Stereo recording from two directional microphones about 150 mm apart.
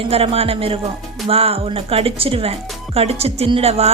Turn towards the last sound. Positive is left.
turn(degrees=-40)  # may be behind; listen again after turning